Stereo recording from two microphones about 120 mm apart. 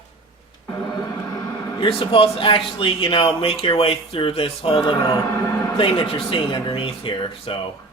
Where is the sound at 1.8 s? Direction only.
45° left (ahead or behind).